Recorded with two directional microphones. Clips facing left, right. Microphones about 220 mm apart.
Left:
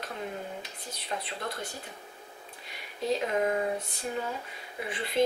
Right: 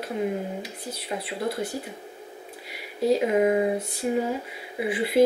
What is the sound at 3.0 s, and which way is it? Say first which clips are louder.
Speech: right 7 dB; 10° right (ahead or behind).